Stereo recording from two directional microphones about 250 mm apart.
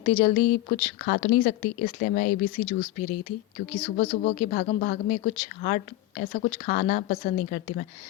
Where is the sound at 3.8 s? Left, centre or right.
Left.